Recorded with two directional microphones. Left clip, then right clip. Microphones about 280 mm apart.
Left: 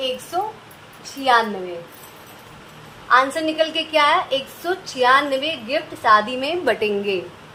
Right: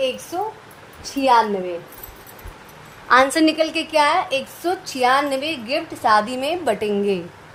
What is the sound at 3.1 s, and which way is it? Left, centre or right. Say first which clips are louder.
A woman's voice: right 2 dB; right.